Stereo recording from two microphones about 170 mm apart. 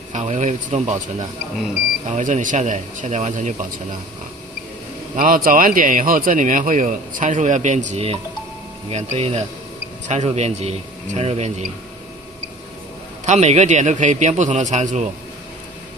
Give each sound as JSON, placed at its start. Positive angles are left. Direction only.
{"t": 0.1, "sound": "speech", "side_deg": -45}
{"t": 2.0, "sound": "speech", "side_deg": -45}
{"t": 5.1, "sound": "a man's voice", "side_deg": -55}
{"t": 13.2, "sound": "speech", "side_deg": -40}